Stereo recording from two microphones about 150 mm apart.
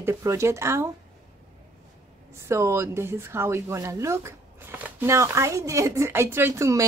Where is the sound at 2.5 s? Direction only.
20° right (ahead or behind).